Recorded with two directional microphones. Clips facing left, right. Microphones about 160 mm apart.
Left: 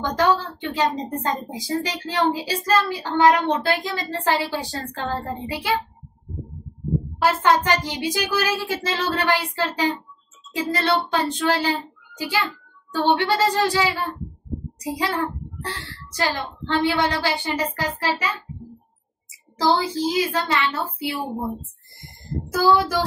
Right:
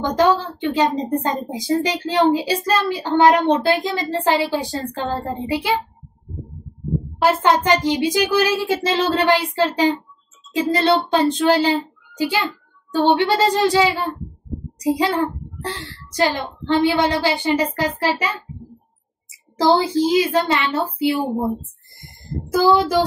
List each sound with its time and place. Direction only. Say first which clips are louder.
0.0 s a woman's voice: right 4 dB; 15° right (ahead or behind)
7.2 s a woman's voice: right 3 dB; 20° right (ahead or behind)
19.6 s a woman's voice: right 5 dB; 25° right (ahead or behind)
22.5 s a woman's voice: right 3 dB; 20° right (ahead or behind)